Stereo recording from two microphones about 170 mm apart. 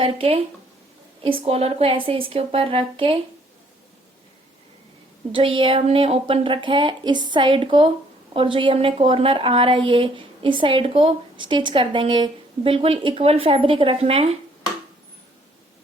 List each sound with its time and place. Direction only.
0.0 s a woman's voice: 35° right (ahead or behind)
5.3 s a woman's voice: 30° right (ahead or behind)